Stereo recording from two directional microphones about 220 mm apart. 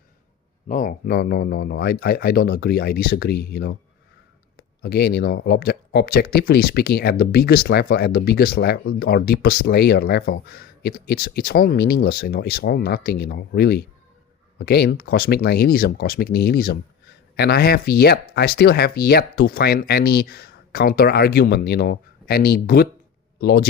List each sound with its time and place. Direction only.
0.7 s speech: 40° left (ahead or behind)